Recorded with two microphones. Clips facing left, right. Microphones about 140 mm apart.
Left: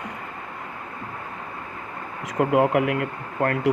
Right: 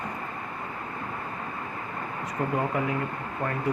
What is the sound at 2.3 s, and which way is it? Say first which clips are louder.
Speech: left 9 dB; 90° left.